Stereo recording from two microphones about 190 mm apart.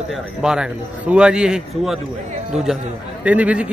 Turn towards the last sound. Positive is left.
turn(degrees=-5)  # may be behind; listen again after turning